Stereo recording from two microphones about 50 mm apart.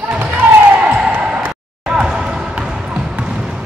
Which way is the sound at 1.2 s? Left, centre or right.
Right.